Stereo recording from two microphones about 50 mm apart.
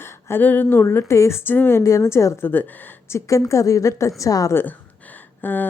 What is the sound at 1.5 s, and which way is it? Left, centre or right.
Speech, left.